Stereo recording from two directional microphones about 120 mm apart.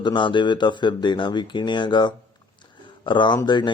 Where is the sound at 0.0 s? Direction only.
40° left (ahead or behind).